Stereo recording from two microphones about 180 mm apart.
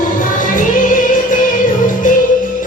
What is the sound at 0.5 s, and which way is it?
Music, 45° left (ahead or behind).